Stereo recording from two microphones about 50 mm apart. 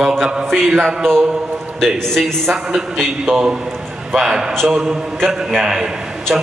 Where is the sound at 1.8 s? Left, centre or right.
Centre.